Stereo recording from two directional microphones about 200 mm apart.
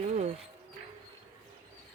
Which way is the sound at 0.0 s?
35° right (ahead or behind).